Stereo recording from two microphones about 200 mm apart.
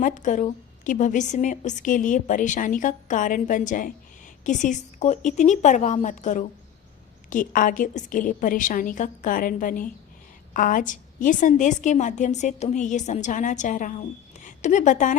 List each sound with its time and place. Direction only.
0.0 s a woman's voice: 40° left (ahead or behind)